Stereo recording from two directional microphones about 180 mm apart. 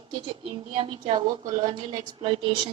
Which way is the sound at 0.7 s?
30° right (ahead or behind).